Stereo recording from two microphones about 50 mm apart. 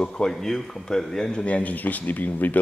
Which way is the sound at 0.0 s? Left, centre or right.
Centre.